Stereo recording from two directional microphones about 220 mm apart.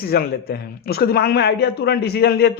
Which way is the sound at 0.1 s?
45° left (ahead or behind).